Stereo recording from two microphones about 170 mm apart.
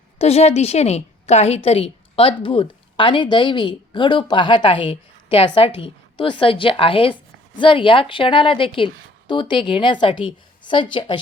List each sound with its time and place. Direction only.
0.2 s a woman's voice: 40° left (ahead or behind)